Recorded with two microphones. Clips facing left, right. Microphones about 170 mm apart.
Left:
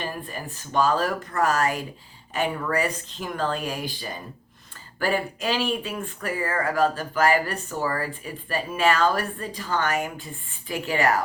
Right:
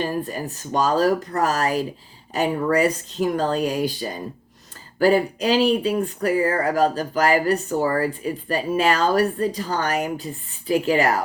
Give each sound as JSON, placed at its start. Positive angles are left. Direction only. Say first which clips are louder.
{"t": 0.0, "sound": "speech", "louder": "right 7 dB", "side_deg": -40}